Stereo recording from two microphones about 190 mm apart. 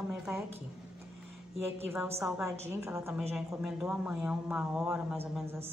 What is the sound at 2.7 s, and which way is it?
Speech, 15° right (ahead or behind).